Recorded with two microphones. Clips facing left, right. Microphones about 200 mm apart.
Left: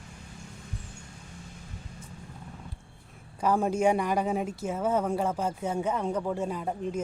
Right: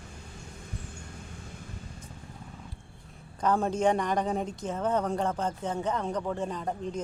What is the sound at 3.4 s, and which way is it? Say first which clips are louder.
A woman's voice: left 1 dB; 10° left (ahead or behind).